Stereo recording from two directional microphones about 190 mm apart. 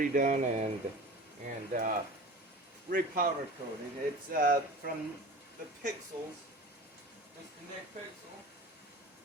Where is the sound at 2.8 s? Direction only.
50° right (ahead or behind).